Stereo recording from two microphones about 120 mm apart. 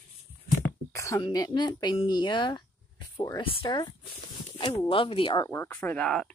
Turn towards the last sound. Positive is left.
turn(degrees=10)  # may be behind; listen again after turning